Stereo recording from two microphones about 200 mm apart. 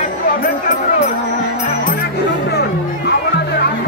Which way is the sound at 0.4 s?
45° left (ahead or behind).